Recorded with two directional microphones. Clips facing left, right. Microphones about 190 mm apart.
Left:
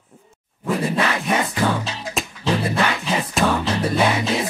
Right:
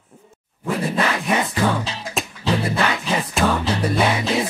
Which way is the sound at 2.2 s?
Centre (ahead or behind).